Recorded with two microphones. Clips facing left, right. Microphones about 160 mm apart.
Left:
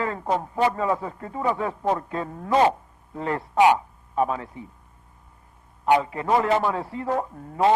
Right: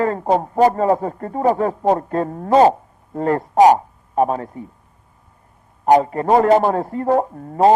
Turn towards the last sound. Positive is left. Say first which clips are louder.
# right 7 dB
turn(degrees=-40)  # may be behind; listen again after turning